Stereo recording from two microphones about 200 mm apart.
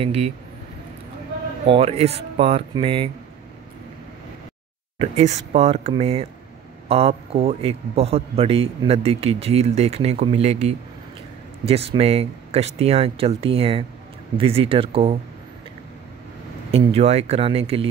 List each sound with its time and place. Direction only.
0.0 s speech: 30° right (ahead or behind)
1.7 s a man's voice: 30° right (ahead or behind)
4.9 s a man's voice: 35° right (ahead or behind)
16.7 s a man's voice: 30° right (ahead or behind)